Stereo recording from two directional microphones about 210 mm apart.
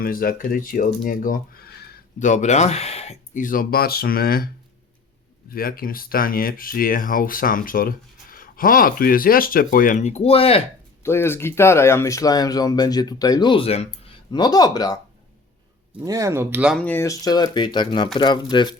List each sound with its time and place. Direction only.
0.0 s speech: 45° left (ahead or behind)
2.1 s speech: 35° left (ahead or behind)
5.5 s speech: 45° left (ahead or behind); by 10.6 s 30° left (ahead or behind)
11.0 s speech: 10° left (ahead or behind)
16.0 s speech: 15° right (ahead or behind)
16.8 s speech: 10° left (ahead or behind)